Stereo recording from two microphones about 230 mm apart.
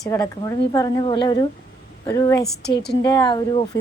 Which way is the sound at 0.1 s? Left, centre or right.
Centre.